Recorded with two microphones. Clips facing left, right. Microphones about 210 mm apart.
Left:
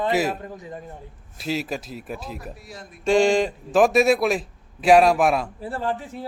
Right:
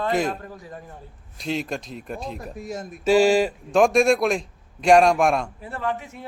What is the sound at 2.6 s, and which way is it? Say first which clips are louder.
Speech: right 9 dB; 45° right (ahead or behind).